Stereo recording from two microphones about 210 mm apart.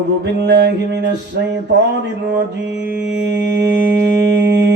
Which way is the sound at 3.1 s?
55° right (ahead or behind).